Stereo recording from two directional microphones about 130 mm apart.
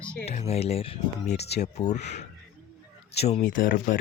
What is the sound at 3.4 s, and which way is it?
Speech, 90° left.